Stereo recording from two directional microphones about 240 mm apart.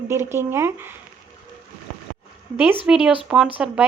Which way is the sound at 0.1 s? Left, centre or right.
Centre.